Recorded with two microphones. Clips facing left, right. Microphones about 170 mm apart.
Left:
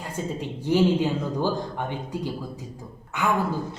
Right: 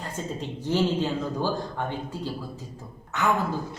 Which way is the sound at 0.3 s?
15° left (ahead or behind).